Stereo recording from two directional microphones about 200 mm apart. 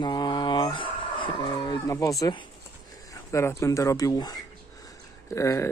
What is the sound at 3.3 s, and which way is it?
Speech, 15° left (ahead or behind).